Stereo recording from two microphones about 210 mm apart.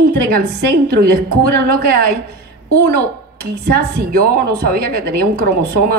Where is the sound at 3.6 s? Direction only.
45° right (ahead or behind).